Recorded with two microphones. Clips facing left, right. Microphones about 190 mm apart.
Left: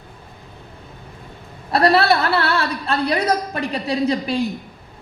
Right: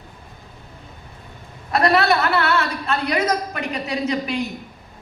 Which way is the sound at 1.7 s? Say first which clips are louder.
Left 2 dB; 35° left (ahead or behind).